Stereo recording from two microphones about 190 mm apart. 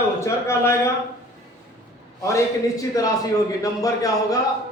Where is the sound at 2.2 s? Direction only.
15° left (ahead or behind).